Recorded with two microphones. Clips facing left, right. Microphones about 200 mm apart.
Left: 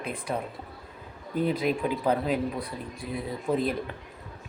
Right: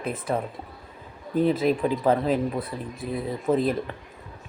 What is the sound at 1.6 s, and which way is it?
Speech, 35° right (ahead or behind).